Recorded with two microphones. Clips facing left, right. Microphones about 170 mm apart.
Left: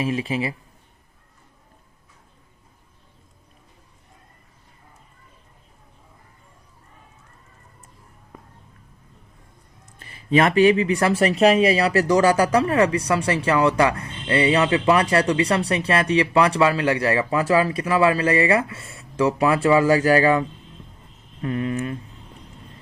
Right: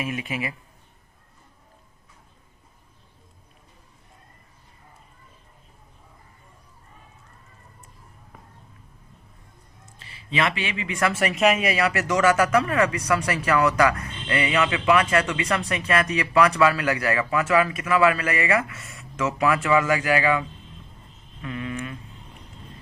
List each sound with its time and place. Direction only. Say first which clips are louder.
0.0 s speech: left 5 dB; 30° left (ahead or behind)
10.0 s speech: left 7 dB; 50° left (ahead or behind)
21.4 s speech: left 7 dB; 35° left (ahead or behind)